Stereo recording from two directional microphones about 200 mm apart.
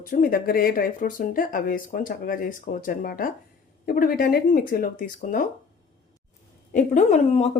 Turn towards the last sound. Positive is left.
turn(degrees=35)  # may be behind; listen again after turning